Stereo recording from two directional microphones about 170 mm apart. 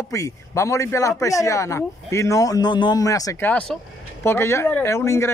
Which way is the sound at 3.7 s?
5° left (ahead or behind).